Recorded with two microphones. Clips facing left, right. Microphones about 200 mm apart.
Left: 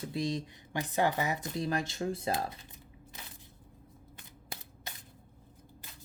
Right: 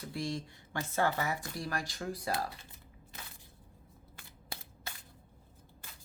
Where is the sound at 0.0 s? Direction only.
20° left (ahead or behind).